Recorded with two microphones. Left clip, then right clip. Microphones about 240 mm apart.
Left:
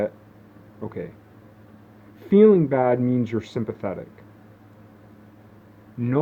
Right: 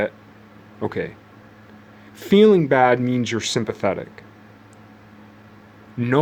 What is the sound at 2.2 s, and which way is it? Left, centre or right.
Speech, right.